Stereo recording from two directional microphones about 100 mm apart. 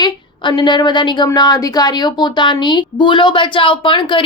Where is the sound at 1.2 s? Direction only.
40° left (ahead or behind).